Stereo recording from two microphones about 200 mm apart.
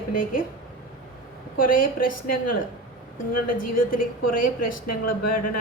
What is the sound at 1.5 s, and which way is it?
Speech, 45° left (ahead or behind).